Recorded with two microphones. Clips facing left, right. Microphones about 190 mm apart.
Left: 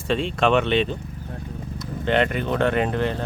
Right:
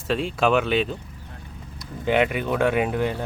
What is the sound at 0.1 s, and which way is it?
Speech, 5° right (ahead or behind).